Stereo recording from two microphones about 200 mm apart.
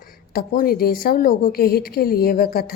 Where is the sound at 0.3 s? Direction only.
45° left (ahead or behind).